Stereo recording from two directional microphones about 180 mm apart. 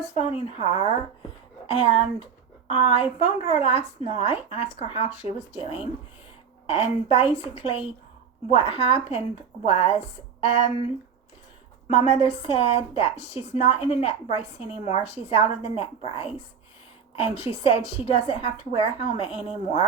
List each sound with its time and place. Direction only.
0.0 s a woman's voice: 35° left (ahead or behind)
1.9 s a woman's voice: 30° left (ahead or behind)
11.9 s a woman's voice: 30° left (ahead or behind)